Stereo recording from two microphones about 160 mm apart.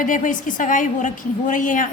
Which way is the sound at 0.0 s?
55° left (ahead or behind).